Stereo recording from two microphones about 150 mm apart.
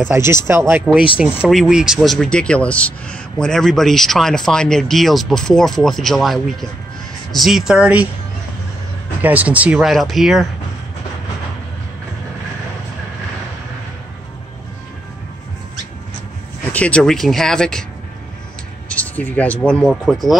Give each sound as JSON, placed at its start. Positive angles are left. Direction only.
{"t": 0.0, "sound": "speech", "side_deg": -15}
{"t": 9.2, "sound": "speech", "side_deg": -10}
{"t": 16.7, "sound": "speech", "side_deg": 10}
{"t": 18.9, "sound": "speech", "side_deg": 10}